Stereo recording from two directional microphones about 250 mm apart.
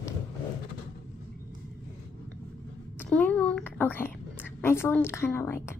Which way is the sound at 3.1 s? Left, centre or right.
Centre.